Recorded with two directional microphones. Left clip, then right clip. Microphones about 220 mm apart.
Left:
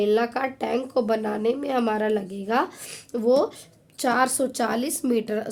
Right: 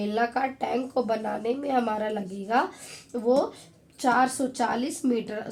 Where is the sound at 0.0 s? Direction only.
45° left (ahead or behind).